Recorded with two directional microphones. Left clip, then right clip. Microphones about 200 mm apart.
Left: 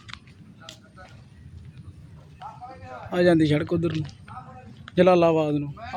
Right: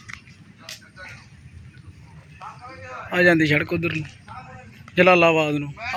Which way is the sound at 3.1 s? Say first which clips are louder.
Right 3 dB; 10° left (ahead or behind).